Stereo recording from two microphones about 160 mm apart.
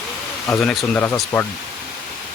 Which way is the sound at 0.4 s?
5° left (ahead or behind).